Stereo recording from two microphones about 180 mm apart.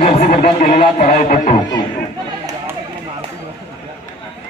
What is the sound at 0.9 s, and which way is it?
Speech, 50° left (ahead or behind).